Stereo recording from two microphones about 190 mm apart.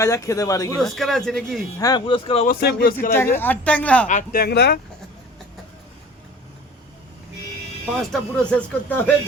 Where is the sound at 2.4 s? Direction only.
50° left (ahead or behind).